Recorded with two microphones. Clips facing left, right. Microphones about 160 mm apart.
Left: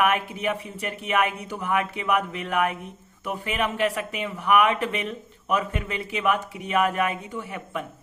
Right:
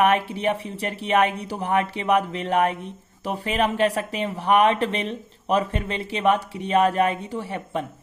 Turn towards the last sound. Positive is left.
turn(degrees=-35)  # may be behind; listen again after turning